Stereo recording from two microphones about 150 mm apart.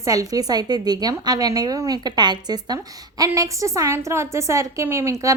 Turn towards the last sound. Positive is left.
turn(degrees=-20)  # may be behind; listen again after turning